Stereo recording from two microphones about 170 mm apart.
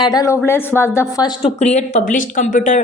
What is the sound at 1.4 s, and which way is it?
Speech, 40° left (ahead or behind).